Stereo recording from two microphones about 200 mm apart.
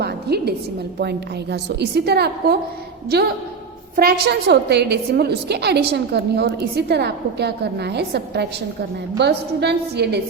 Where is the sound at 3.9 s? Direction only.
50° right (ahead or behind).